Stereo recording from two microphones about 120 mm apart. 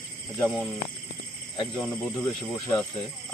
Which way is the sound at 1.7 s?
10° left (ahead or behind).